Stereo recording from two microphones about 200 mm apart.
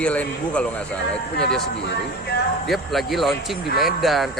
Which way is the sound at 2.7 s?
Centre (ahead or behind).